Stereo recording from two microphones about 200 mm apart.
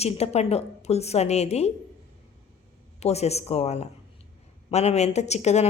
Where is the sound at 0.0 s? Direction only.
30° left (ahead or behind).